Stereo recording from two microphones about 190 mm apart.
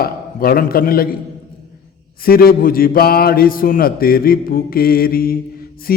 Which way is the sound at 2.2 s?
50° left (ahead or behind).